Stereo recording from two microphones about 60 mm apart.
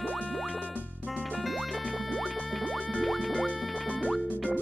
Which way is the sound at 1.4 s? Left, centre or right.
Centre.